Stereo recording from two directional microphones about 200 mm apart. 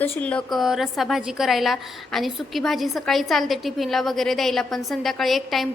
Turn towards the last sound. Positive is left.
turn(degrees=0)  # may be behind; listen again after turning